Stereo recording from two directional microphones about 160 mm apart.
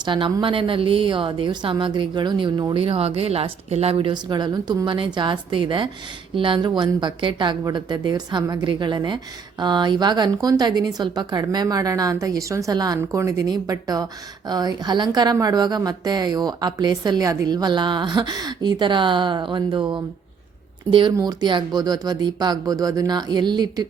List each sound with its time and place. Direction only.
0.0 s a woman's voice: 30° right (ahead or behind)
21.2 s a woman's voice: 25° right (ahead or behind)